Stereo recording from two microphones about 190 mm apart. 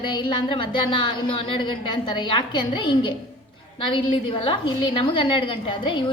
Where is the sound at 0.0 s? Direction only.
25° left (ahead or behind).